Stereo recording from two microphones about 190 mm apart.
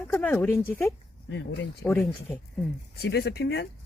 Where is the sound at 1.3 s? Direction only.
65° left (ahead or behind).